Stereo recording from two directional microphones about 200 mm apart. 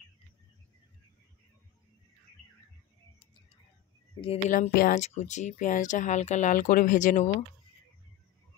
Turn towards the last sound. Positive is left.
turn(degrees=40)  # may be behind; listen again after turning